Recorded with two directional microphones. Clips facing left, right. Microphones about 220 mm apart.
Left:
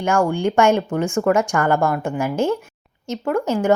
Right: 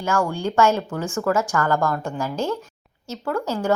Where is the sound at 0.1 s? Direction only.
25° left (ahead or behind); by 2.6 s 10° left (ahead or behind).